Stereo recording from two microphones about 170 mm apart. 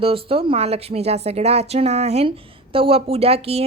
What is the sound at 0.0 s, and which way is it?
A woman's voice, 35° right (ahead or behind).